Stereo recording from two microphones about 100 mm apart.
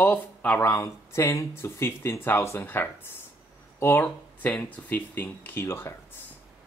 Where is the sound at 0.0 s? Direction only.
15° left (ahead or behind).